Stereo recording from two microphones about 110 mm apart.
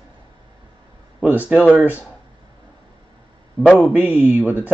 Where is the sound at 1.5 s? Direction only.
10° right (ahead or behind).